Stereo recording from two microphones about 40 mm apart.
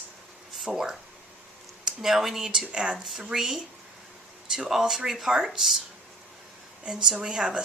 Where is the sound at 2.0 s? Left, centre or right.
Centre.